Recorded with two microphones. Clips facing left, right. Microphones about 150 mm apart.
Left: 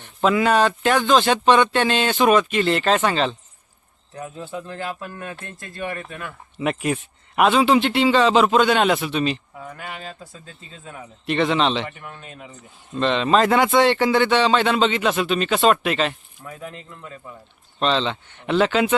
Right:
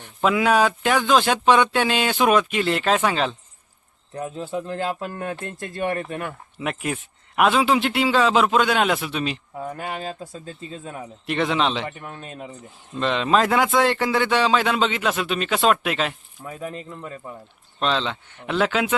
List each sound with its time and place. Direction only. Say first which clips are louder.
0.0 s a man's voice: left 1 dB; 5° right (ahead or behind)
4.2 s speech: right 4 dB; 20° right (ahead or behind)
6.6 s a man's voice: left 4 dB; centre (ahead or behind)
9.6 s speech: right 5 dB; 35° right (ahead or behind)
11.3 s a man's voice: left 2 dB; 5° right (ahead or behind)
11.9 s speech: right 3 dB; 35° right (ahead or behind)
12.9 s a man's voice: left 2 dB; 5° right (ahead or behind)
17.7 s a man's voice: left 2 dB; centre (ahead or behind)